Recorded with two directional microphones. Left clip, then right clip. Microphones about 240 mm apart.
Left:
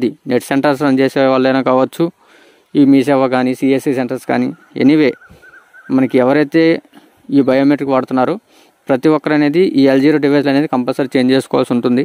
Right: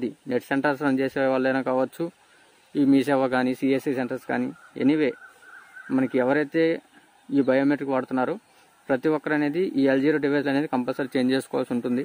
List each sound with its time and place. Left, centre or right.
0.0 s speech: left